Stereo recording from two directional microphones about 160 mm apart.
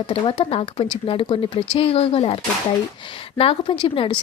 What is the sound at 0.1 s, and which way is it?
A woman's voice, 35° left (ahead or behind).